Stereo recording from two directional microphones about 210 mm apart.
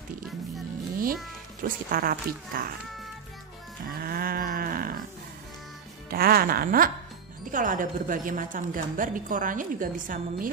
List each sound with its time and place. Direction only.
1.6 s speech: 45° right (ahead or behind)
4.0 s livestock: 45° right (ahead or behind)
6.0 s a woman's voice: 45° right (ahead or behind)